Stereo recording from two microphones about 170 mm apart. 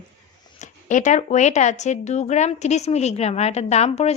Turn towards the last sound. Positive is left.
turn(degrees=40)  # may be behind; listen again after turning